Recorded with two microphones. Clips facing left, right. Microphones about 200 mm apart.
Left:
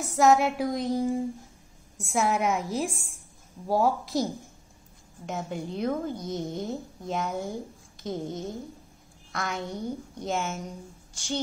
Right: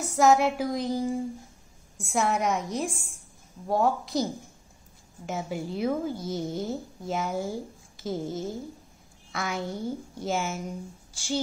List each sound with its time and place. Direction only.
0.0 s a woman's voice: centre (ahead or behind)